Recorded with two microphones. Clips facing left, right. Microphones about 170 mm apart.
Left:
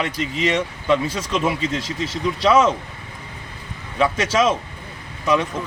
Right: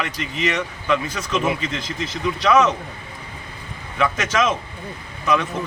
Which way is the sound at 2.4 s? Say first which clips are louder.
Left 1 dB; 30° left (ahead or behind).